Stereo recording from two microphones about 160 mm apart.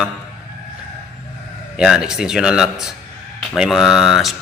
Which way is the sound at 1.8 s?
5° right (ahead or behind).